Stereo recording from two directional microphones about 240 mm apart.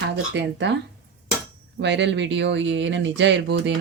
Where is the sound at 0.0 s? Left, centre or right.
Right.